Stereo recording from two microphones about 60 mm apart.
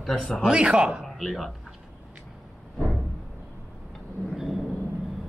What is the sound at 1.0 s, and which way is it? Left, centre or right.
Speech, centre.